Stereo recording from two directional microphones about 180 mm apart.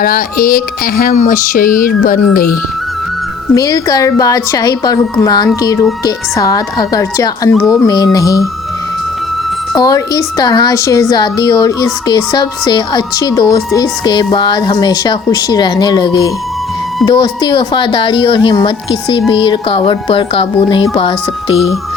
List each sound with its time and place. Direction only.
0.0 s speech: 55° left (ahead or behind)
3.5 s speech: 20° left (ahead or behind)
9.7 s speech: 20° left (ahead or behind)